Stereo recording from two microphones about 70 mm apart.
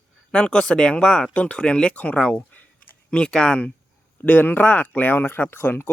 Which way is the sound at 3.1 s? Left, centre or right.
Centre.